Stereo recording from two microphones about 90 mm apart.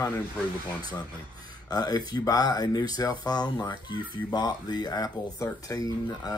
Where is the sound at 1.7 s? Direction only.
50° left (ahead or behind).